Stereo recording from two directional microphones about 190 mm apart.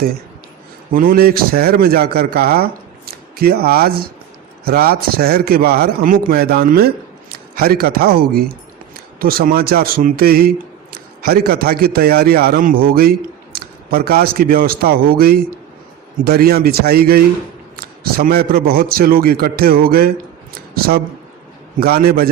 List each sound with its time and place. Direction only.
0.9 s a man's voice: 50° right (ahead or behind)